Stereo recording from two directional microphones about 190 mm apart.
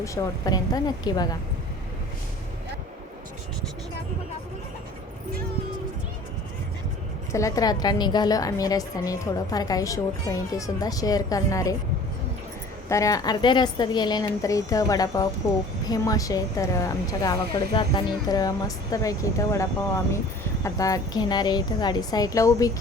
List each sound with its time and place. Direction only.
0.0 s a woman's voice: 20° left (ahead or behind)
7.3 s a woman's voice: 15° left (ahead or behind)
12.9 s a woman's voice: 15° left (ahead or behind)
20.7 s a woman's voice: 20° left (ahead or behind)